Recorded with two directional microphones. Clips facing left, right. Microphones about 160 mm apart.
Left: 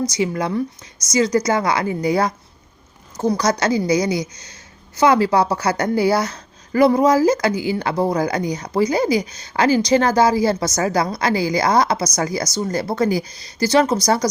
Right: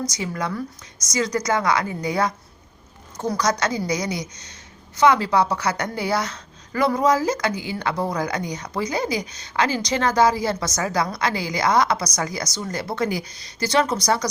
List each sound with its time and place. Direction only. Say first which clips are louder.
0.2 s a woman's voice: left 7 dB; 25° left (ahead or behind)
9.2 s a woman's voice: left 1 dB; 35° right (ahead or behind)
9.5 s a woman's voice: left 7 dB; 35° left (ahead or behind)